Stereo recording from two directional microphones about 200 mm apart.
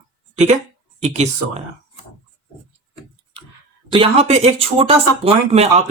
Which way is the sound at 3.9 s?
30° right (ahead or behind).